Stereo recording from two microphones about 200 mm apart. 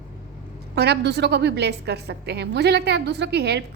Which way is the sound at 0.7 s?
55° right (ahead or behind).